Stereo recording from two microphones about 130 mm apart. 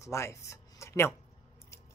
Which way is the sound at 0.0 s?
20° left (ahead or behind).